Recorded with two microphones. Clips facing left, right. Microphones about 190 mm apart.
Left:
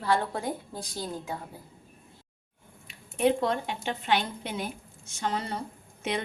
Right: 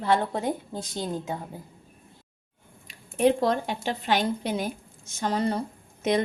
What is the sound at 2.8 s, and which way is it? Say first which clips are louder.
A woman's voice: right 3 dB; 40° right (ahead or behind).